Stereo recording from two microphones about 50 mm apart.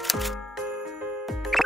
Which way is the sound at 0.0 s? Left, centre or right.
Centre.